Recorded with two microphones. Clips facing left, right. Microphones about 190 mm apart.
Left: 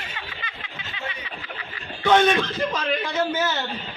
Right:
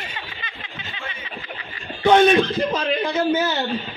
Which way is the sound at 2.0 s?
20° right (ahead or behind).